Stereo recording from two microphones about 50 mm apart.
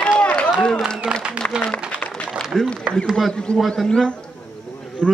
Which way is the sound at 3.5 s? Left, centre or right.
Centre.